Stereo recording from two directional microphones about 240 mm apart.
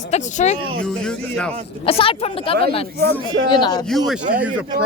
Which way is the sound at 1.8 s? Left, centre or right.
Left.